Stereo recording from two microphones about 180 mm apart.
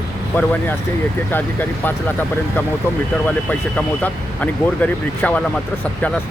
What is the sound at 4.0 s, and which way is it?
Speech, 10° left (ahead or behind).